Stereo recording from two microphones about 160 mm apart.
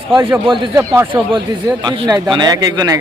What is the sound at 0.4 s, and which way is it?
Speech, 30° right (ahead or behind).